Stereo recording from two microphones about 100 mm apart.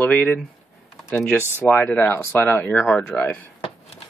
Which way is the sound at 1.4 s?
20° left (ahead or behind).